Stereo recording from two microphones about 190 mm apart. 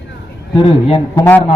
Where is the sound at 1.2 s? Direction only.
10° left (ahead or behind).